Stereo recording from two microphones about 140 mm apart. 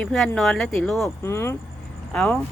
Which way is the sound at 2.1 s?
5° left (ahead or behind).